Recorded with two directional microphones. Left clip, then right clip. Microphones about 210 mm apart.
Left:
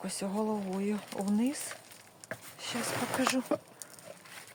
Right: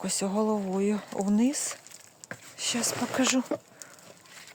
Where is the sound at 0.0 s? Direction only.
50° right (ahead or behind).